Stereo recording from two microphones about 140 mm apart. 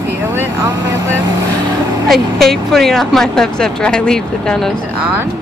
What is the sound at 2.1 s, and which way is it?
Speech, centre (ahead or behind).